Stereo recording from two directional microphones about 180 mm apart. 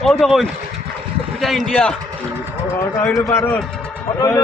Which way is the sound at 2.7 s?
15° left (ahead or behind).